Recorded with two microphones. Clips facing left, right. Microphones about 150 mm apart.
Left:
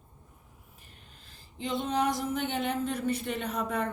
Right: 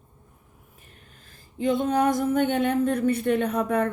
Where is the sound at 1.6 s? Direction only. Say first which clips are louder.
Right 7 dB; 50° right (ahead or behind).